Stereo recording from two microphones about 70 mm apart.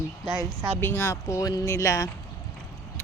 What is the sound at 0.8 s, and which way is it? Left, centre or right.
Speech, left.